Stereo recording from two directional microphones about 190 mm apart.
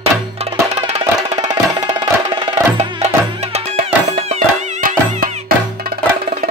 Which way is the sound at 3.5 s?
35° right (ahead or behind).